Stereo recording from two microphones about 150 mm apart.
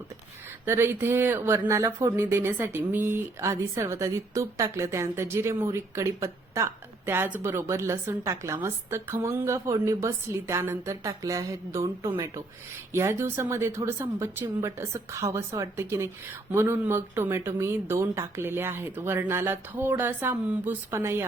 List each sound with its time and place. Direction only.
0.6 s speech: 15° right (ahead or behind)